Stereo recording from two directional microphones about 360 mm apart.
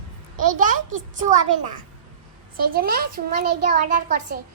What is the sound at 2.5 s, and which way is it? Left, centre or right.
A child's voice, right.